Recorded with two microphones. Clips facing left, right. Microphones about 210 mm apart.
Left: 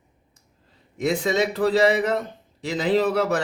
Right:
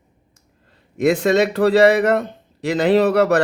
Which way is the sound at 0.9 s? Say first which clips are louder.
Right 7 dB; 65° right (ahead or behind).